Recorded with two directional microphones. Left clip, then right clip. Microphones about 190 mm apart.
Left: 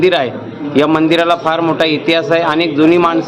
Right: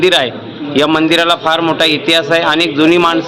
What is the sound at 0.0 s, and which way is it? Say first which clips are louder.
A man's voice: right 1 dB; 5° left (ahead or behind).